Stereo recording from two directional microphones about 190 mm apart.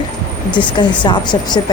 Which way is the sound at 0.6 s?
25° left (ahead or behind).